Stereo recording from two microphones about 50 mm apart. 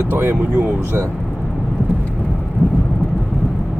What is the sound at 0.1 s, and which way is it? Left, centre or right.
Speech, right.